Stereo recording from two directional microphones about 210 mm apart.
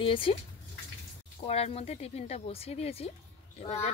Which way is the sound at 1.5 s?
30° left (ahead or behind).